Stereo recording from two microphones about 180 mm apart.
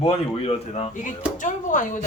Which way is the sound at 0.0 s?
30° left (ahead or behind).